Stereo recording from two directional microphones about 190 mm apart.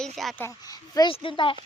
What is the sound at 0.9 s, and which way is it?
Speech, 25° left (ahead or behind).